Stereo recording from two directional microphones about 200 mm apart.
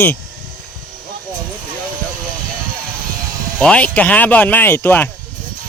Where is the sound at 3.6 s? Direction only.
5° left (ahead or behind).